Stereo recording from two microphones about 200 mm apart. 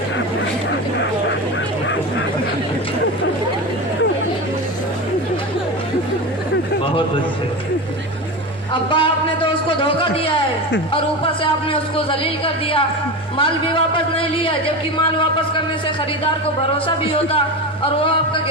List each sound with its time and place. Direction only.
8.7 s a man's voice: 25° left (ahead or behind)
11.7 s a man's voice: 25° left (ahead or behind)
13.4 s a man's voice: 25° left (ahead or behind)
16.7 s a man's voice: 25° left (ahead or behind)